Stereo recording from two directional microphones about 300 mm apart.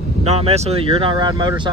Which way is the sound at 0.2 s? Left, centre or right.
Centre.